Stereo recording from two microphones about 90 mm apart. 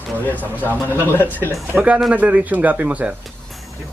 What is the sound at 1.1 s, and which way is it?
Speech, 20° left (ahead or behind).